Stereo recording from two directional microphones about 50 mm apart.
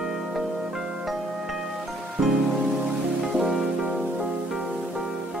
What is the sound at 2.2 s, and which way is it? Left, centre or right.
Music, centre.